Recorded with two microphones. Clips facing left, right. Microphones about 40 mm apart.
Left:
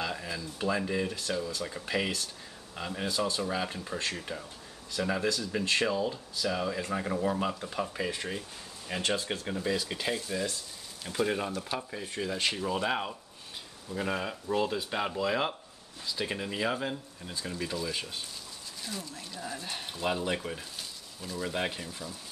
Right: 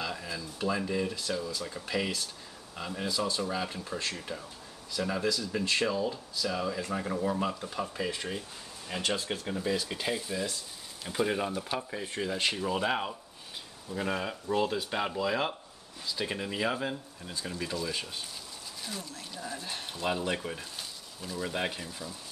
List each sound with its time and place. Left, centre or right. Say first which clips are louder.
0.0 s speech: left 1 dB; centre